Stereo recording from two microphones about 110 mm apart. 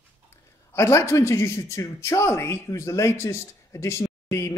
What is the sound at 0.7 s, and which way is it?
Speech, 25° left (ahead or behind).